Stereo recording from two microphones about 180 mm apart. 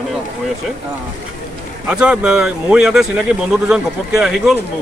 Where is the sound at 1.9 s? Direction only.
5° right (ahead or behind).